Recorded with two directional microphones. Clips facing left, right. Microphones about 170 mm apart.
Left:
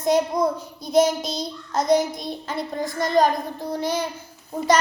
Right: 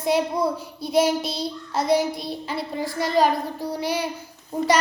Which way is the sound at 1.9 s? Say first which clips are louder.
Left 1 dB; 5° right (ahead or behind).